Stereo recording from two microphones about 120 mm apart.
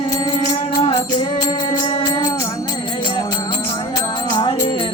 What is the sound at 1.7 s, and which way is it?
Music, 40° left (ahead or behind).